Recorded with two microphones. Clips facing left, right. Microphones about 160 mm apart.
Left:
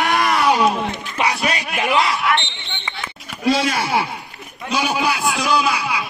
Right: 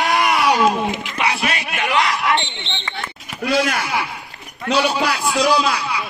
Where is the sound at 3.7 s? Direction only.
30° left (ahead or behind).